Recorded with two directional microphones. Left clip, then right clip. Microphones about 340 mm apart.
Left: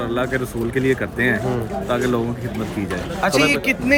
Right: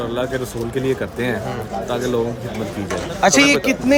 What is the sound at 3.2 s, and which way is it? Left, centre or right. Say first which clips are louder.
Speech: right 3 dB; centre.